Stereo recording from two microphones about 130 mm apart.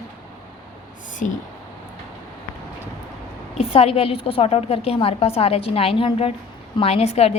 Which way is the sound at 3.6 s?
50° left (ahead or behind).